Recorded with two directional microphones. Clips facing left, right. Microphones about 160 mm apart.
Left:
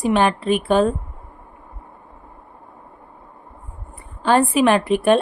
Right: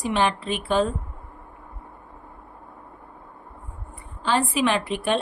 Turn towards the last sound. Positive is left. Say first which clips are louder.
# left 8 dB
turn(degrees=50)  # may be behind; listen again after turning